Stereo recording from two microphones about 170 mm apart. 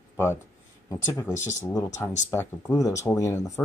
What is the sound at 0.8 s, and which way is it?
Speech, 15° left (ahead or behind).